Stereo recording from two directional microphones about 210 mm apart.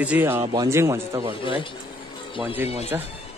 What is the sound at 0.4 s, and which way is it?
Speech, 20° right (ahead or behind).